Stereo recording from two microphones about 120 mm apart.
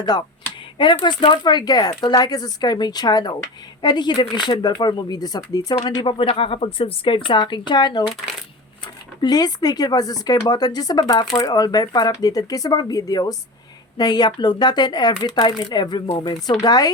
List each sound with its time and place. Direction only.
0.0 s speech: 35° left (ahead or behind)
9.2 s speech: 35° left (ahead or behind)